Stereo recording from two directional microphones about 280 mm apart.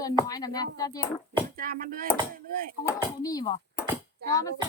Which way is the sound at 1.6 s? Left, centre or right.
Right.